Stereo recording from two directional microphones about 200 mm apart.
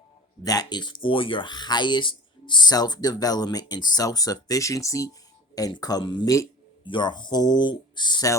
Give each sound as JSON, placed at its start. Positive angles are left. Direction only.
{"t": 0.4, "sound": "speech", "side_deg": 20}